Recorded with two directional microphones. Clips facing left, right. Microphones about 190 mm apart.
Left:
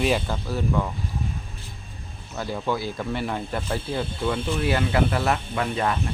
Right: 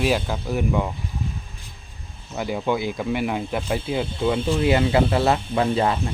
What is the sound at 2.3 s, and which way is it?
Speech, 15° right (ahead or behind).